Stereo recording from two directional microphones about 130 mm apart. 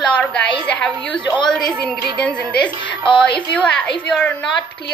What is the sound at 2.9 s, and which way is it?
Speech, 40° left (ahead or behind).